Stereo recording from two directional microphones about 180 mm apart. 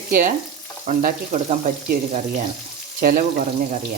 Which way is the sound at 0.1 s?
50° right (ahead or behind).